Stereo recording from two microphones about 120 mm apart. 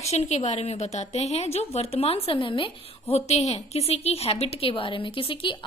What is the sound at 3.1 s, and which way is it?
A woman's voice, 65° left (ahead or behind).